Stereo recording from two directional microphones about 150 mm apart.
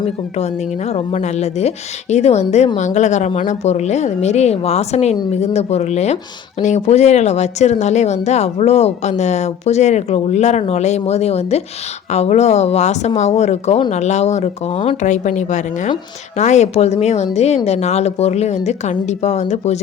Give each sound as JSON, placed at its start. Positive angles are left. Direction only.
{"t": 0.3, "sound": "speech", "side_deg": 45}
{"t": 15.0, "sound": "speech", "side_deg": 55}